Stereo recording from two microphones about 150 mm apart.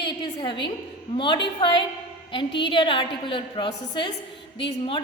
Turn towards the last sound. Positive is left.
turn(degrees=35)  # may be behind; listen again after turning